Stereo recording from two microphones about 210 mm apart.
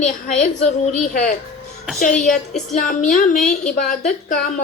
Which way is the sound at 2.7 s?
40° left (ahead or behind).